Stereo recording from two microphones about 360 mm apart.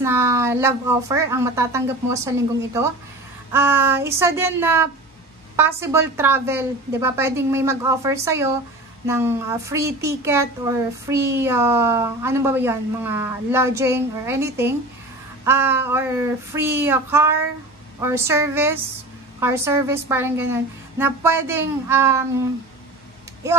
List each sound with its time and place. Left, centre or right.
0.0 s speech: centre
3.5 s speech: centre